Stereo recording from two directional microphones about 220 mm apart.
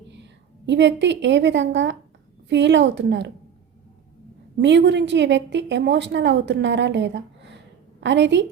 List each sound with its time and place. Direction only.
0.1 s a woman's voice: 55° right (ahead or behind)
4.5 s a woman's voice: 55° right (ahead or behind)